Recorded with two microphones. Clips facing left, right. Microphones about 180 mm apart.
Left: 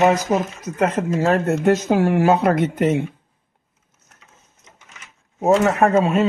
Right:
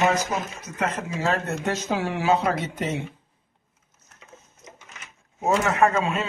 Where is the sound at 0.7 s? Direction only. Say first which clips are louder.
Left 8 dB; 50° left (ahead or behind).